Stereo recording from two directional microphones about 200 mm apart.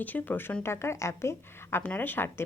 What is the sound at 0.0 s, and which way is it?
Speech, 10° left (ahead or behind).